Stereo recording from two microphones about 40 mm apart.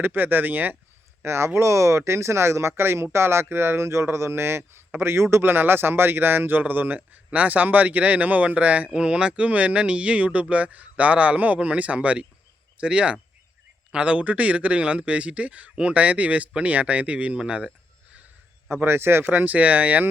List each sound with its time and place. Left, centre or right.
0.0 s speech: right
2.4 s speech: right
9.0 s speech: right
9.5 s a man's voice: right
17.3 s speech: right
18.9 s speech: right
19.3 s speech: right